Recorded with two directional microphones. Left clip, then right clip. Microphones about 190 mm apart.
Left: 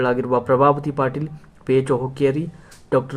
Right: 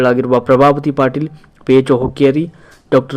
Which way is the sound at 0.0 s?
20° right (ahead or behind).